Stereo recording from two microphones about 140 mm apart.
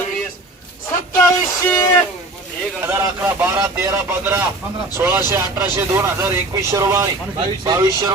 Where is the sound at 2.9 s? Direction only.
20° right (ahead or behind).